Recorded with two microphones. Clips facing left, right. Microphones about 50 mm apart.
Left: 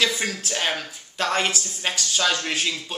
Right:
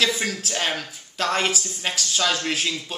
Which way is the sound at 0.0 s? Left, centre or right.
Centre.